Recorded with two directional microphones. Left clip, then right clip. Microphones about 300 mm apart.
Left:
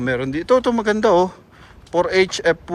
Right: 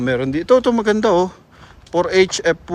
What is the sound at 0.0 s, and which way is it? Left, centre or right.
A woman's voice, centre.